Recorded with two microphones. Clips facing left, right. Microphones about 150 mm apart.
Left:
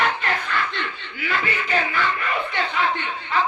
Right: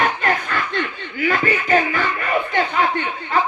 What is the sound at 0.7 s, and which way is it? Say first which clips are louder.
Chuckle: right 6 dB; 45° right (ahead or behind).